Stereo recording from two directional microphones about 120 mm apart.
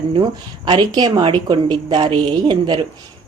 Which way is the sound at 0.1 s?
40° right (ahead or behind).